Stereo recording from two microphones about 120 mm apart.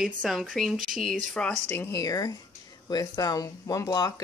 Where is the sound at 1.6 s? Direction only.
20° left (ahead or behind).